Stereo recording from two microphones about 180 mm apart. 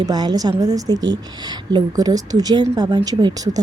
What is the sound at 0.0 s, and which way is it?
A woman's voice, 25° right (ahead or behind).